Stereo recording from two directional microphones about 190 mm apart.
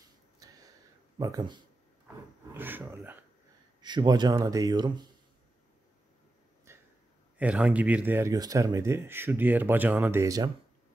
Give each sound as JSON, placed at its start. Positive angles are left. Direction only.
{"t": 0.4, "sound": "a sound", "side_deg": -20}
{"t": 1.1, "sound": "speech", "side_deg": -20}
{"t": 2.5, "sound": "speech", "side_deg": -10}
{"t": 3.8, "sound": "speech", "side_deg": -25}
{"t": 6.7, "sound": "a sound", "side_deg": -15}
{"t": 7.3, "sound": "speech", "side_deg": -5}